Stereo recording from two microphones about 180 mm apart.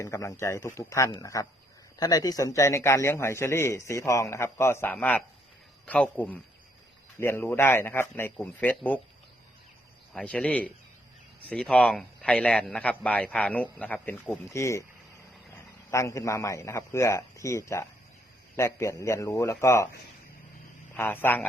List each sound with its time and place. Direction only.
0.0 s a man's voice: 15° left (ahead or behind)
10.1 s a man's voice: 5° left (ahead or behind)
15.9 s a man's voice: 15° left (ahead or behind)
20.9 s a man's voice: 10° left (ahead or behind)